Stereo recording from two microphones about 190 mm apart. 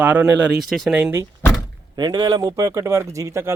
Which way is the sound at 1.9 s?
20° right (ahead or behind).